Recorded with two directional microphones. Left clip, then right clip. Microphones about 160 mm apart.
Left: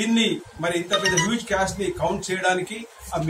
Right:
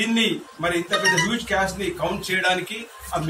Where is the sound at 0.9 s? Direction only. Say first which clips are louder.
Right 2 dB; 15° right (ahead or behind).